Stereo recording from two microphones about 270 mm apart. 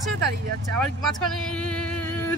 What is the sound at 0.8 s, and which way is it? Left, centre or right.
Speech, centre.